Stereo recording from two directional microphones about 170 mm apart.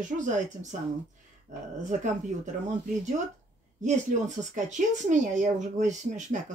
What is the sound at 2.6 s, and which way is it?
Speech, 45° right (ahead or behind).